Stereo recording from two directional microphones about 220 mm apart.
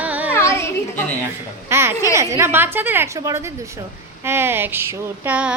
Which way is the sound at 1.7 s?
10° right (ahead or behind).